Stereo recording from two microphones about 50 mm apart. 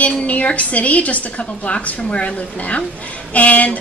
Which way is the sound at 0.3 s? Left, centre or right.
Left.